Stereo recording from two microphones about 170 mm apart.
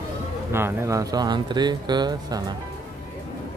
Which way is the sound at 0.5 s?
15° right (ahead or behind).